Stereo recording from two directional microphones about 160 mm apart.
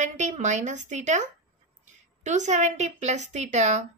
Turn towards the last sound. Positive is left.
turn(degrees=-45)  # may be behind; listen again after turning